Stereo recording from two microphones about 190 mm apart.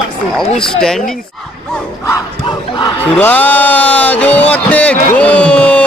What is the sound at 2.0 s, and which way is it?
Battle cry, 20° left (ahead or behind).